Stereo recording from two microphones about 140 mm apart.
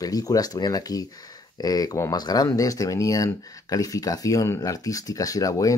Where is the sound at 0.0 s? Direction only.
25° left (ahead or behind).